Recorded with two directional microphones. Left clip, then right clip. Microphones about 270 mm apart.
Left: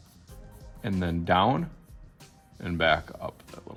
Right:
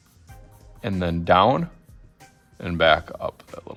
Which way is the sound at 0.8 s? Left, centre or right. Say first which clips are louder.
Right 5 dB; right.